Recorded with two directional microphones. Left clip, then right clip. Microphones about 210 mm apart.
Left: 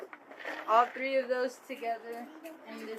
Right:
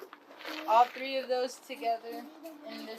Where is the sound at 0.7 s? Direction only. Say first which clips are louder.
Right 1 dB; 45° right (ahead or behind).